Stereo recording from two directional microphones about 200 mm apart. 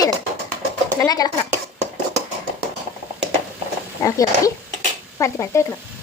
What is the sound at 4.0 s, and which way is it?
Speech, 15° left (ahead or behind).